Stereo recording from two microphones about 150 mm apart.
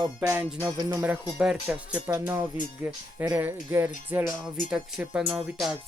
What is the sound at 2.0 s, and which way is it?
Speech, 25° right (ahead or behind).